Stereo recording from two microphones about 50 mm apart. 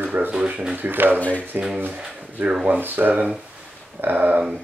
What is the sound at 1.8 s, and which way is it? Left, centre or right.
Speech, right.